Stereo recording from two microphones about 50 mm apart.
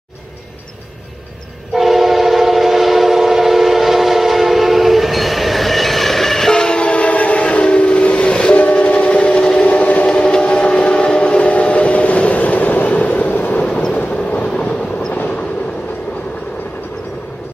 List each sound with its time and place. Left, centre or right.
1.7 s train: centre; by 10.0 s left
10.0 s train: centre; by 13.6 s left
13.6 s vehicle: left
14.4 s train: left